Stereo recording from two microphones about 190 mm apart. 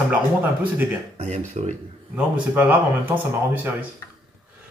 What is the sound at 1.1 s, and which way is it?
Speech, 35° right (ahead or behind).